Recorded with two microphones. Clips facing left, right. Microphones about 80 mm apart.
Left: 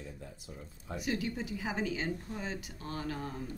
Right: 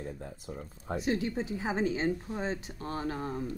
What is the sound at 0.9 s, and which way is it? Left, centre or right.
A woman's voice, right.